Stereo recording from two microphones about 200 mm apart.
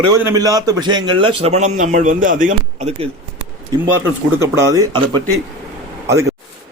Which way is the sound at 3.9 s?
15° right (ahead or behind).